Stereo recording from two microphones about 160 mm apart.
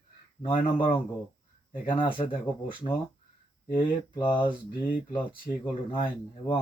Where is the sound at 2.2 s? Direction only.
40° left (ahead or behind).